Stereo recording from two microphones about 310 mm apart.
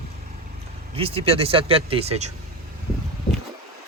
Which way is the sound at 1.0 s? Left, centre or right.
Centre.